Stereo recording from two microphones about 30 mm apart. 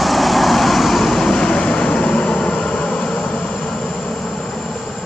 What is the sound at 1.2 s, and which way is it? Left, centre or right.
Vehicle, left.